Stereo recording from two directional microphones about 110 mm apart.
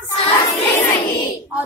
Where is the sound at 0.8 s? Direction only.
40° left (ahead or behind).